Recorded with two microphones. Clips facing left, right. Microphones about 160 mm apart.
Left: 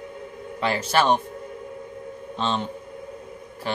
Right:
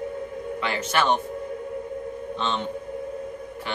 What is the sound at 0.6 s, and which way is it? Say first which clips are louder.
Speech: left 4 dB; 35° left (ahead or behind).